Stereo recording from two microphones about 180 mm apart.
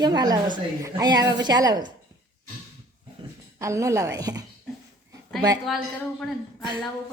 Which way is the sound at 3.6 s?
15° right (ahead or behind).